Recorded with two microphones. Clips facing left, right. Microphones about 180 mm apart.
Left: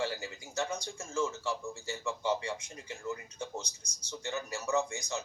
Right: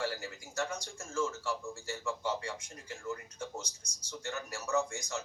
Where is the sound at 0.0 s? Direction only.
20° left (ahead or behind).